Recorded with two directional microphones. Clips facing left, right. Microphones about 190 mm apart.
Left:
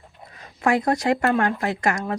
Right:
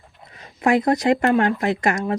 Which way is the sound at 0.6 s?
20° right (ahead or behind).